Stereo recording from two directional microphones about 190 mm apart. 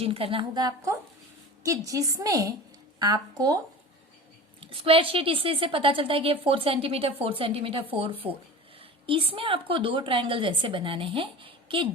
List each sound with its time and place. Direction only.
0.0 s a woman's voice: 30° right (ahead or behind)
4.6 s a woman's voice: 30° right (ahead or behind)